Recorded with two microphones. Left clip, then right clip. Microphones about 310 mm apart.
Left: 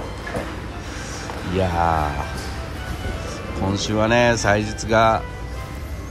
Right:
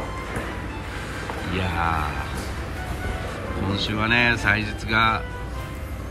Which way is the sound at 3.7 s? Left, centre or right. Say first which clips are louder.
Left 3 dB; centre.